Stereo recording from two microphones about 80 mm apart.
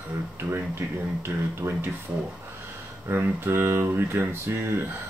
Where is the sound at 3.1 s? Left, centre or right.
Right.